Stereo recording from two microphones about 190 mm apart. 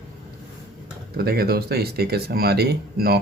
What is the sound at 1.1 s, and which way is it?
Speech, 55° right (ahead or behind).